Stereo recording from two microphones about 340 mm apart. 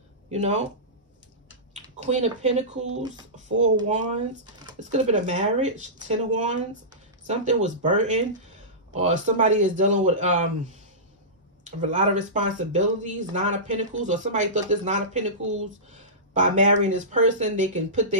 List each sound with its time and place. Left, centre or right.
0.3 s speech: centre
1.7 s a sound: centre
3.0 s speech: centre
11.6 s speech: right